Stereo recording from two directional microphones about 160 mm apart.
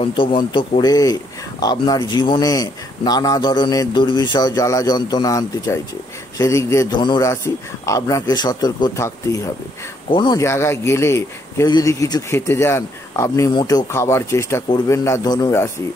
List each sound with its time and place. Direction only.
0.0 s a man's voice: 30° left (ahead or behind)
10.4 s speech: 15° left (ahead or behind)